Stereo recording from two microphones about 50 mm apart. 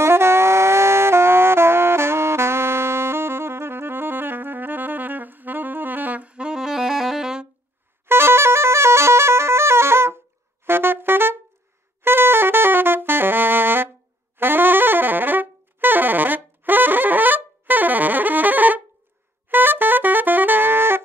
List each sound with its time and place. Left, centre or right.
0.0 s music: right; by 7.4 s centre
8.1 s music: right
14.4 s saxophone: right